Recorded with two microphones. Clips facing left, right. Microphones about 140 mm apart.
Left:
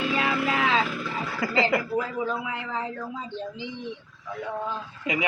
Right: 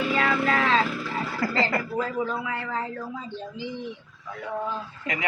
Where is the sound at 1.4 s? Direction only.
5° left (ahead or behind).